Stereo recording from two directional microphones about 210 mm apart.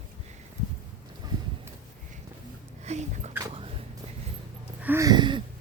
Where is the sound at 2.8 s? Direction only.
35° right (ahead or behind).